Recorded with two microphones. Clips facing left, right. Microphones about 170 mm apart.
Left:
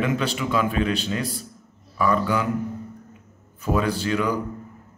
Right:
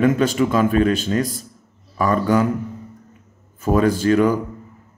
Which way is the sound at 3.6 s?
45° right (ahead or behind).